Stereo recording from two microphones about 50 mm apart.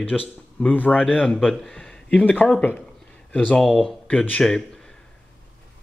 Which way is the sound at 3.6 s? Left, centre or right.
Centre.